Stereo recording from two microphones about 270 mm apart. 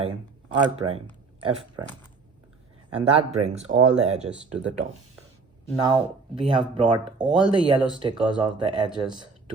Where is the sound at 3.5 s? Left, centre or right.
Centre.